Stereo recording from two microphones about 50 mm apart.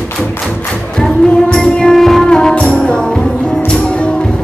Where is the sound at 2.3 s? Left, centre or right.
Centre.